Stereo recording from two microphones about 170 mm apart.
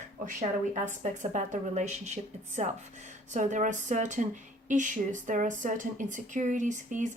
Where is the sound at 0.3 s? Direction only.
50° right (ahead or behind).